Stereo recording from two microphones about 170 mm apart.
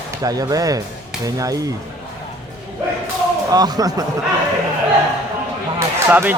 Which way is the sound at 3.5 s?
20° right (ahead or behind).